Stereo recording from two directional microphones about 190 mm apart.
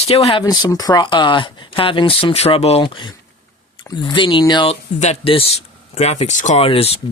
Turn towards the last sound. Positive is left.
turn(degrees=30)  # may be behind; listen again after turning